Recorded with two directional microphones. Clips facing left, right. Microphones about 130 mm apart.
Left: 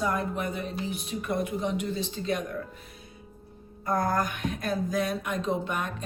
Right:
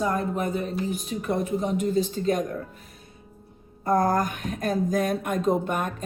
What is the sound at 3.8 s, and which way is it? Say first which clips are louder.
Speech: right 5 dB; 40° right (ahead or behind).